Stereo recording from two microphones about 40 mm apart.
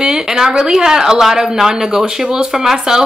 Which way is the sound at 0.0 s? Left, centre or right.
Centre.